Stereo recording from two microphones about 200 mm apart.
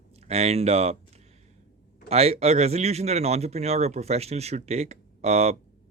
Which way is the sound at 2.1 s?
30° right (ahead or behind).